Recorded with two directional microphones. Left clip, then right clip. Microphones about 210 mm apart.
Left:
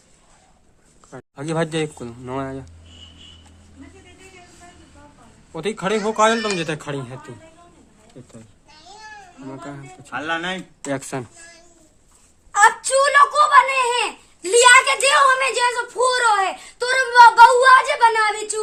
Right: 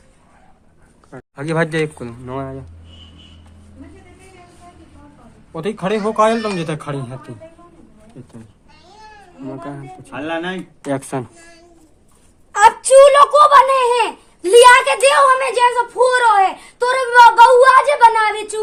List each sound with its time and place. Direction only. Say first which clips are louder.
1.1 s a child's voice: right 4 dB; 10° left (ahead or behind)
5.5 s speech: right 2 dB; 5° left (ahead or behind)
9.5 s speech: right 5 dB; 5° left (ahead or behind)
10.1 s speech: right 1 dB; 35° left (ahead or behind)
10.8 s speech: right 4 dB; 5° left (ahead or behind)
12.8 s a child's voice: right 7 dB; 45° left (ahead or behind)
13.5 s a child's voice: right 4 dB; 10° left (ahead or behind)